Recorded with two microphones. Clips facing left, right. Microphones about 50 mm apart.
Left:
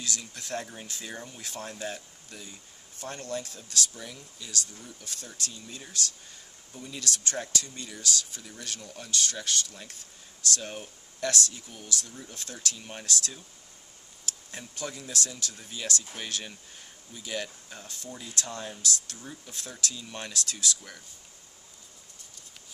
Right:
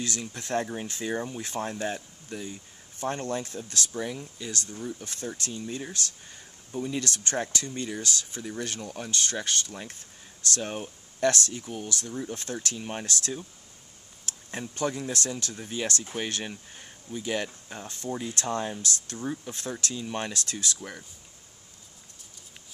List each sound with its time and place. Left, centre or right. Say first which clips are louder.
0.0 s speech: right 4 dB; right